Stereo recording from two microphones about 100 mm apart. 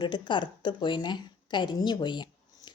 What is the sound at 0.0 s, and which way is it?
A woman's voice, 50° left (ahead or behind).